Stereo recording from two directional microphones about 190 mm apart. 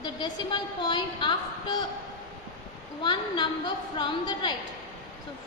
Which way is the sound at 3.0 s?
25° left (ahead or behind).